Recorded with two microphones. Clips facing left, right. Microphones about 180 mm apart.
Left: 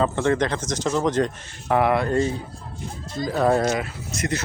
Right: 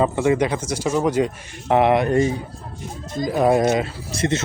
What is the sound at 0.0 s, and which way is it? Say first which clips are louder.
Speech: right 3 dB; 10° right (ahead or behind).